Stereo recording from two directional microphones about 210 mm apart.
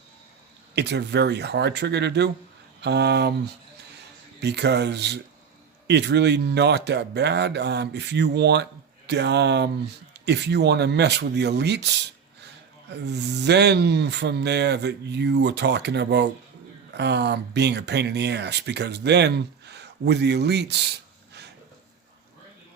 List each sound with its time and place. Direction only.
0.8 s speech: 55° right (ahead or behind)
12.9 s speech: 55° right (ahead or behind)